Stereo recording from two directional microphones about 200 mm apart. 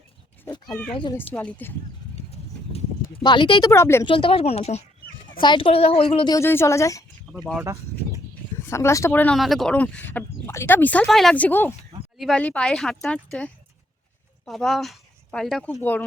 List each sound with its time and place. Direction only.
0.4 s cat: 20° left (ahead or behind)
1.3 s speech: 10° left (ahead or behind)
3.2 s speech: 25° left (ahead or behind)
3.7 s speech: 15° left (ahead or behind)
4.0 s speech: 25° left (ahead or behind)
7.6 s goat: 15° right (ahead or behind)
8.5 s speech: 15° left (ahead or behind)